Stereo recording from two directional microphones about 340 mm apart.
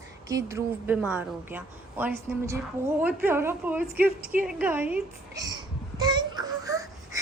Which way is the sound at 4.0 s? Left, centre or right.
Right.